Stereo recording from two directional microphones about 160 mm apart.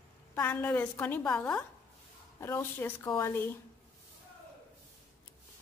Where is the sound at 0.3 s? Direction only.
10° left (ahead or behind).